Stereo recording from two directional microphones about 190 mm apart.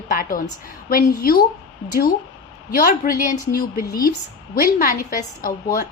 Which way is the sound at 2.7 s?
50° left (ahead or behind).